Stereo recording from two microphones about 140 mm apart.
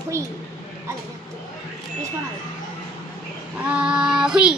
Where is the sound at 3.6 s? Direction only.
10° right (ahead or behind).